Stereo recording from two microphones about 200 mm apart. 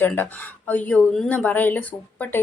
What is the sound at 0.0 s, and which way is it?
Speech, 10° left (ahead or behind).